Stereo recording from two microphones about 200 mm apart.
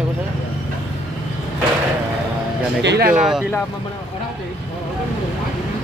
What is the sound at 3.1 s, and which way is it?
Speech, 5° right (ahead or behind).